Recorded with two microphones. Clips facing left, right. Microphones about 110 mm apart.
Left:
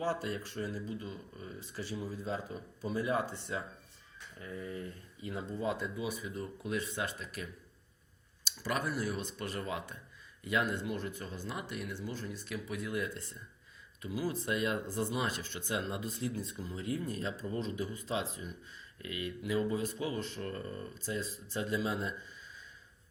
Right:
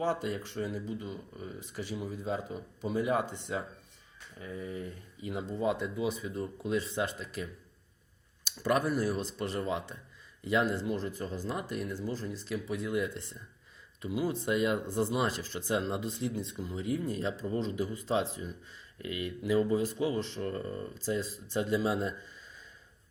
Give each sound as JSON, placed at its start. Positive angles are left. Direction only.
{"t": 0.0, "sound": "speech", "side_deg": -20}
{"t": 8.4, "sound": "speech", "side_deg": -45}
{"t": 12.5, "sound": "speech", "side_deg": -30}
{"t": 15.1, "sound": "speech", "side_deg": -35}